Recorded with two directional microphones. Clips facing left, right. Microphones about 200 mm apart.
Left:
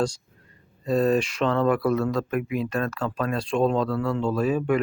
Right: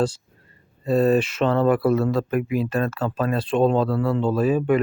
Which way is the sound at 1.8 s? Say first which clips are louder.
Right 3 dB; 30° right (ahead or behind).